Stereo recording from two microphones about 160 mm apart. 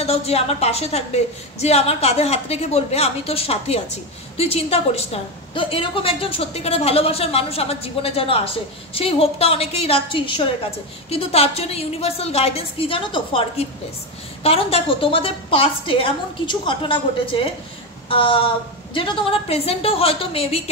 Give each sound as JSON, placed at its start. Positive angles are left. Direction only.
{"t": 0.0, "sound": "a woman's voice", "side_deg": 40}
{"t": 18.0, "sound": "a sound", "side_deg": 30}
{"t": 18.9, "sound": "a woman's voice", "side_deg": 30}